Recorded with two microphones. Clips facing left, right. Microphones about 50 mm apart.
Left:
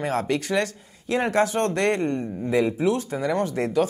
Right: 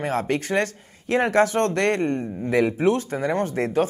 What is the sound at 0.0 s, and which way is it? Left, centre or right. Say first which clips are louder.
Speech: right 1 dB; right.